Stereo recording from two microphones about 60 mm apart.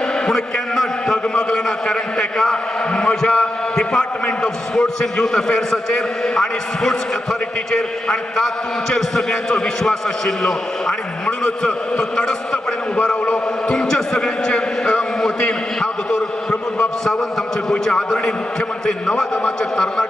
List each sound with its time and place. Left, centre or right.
0.3 s a man's voice: centre
8.9 s a man's voice: centre
13.7 s a sound: centre
17.6 s a man's voice: centre